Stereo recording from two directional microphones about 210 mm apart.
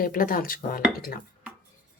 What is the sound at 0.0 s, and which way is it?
Speech, 40° left (ahead or behind).